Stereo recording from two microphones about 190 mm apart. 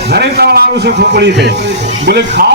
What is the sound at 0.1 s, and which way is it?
Speech, 60° right (ahead or behind).